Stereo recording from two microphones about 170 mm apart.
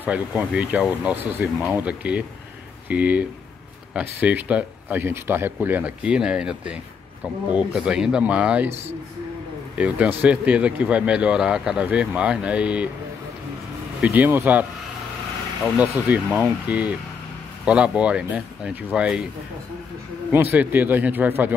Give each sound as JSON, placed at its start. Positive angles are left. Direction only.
{"t": 0.0, "sound": "speech", "side_deg": -10}
{"t": 8.6, "sound": "speech", "side_deg": -40}
{"t": 9.8, "sound": "speech", "side_deg": -10}
{"t": 14.0, "sound": "speech", "side_deg": -10}
{"t": 15.8, "sound": "speech", "side_deg": -10}
{"t": 20.5, "sound": "speech", "side_deg": -10}